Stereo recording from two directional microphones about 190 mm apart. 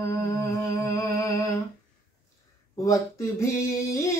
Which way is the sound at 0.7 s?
15° left (ahead or behind).